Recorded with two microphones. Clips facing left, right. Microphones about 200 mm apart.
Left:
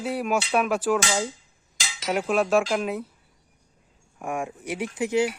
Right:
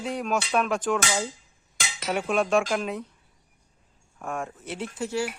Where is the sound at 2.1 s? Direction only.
5° left (ahead or behind).